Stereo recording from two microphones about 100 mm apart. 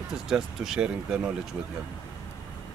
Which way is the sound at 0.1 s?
5° right (ahead or behind).